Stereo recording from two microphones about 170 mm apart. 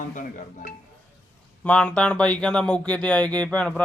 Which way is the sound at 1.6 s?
10° left (ahead or behind).